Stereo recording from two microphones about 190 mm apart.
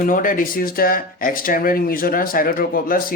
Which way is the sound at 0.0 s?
45° left (ahead or behind).